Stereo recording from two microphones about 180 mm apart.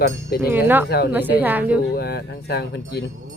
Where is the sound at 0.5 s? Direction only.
10° right (ahead or behind).